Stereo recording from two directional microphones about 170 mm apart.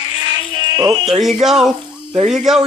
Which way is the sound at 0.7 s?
25° right (ahead or behind).